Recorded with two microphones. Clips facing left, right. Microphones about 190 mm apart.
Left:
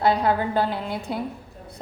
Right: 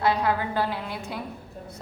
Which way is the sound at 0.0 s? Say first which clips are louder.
Left 3 dB; 30° left (ahead or behind).